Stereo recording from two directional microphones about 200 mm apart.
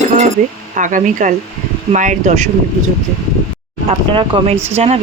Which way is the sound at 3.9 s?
25° right (ahead or behind).